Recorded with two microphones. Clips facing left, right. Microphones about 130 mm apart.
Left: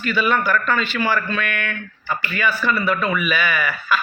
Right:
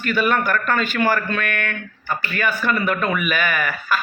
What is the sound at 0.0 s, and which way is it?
Speech, 50° right (ahead or behind).